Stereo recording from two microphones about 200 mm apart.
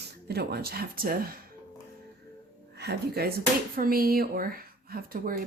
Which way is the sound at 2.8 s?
55° right (ahead or behind).